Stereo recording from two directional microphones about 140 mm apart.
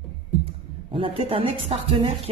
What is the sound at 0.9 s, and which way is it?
Speech, 40° right (ahead or behind).